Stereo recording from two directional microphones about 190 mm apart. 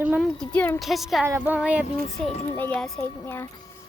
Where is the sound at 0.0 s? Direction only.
10° right (ahead or behind).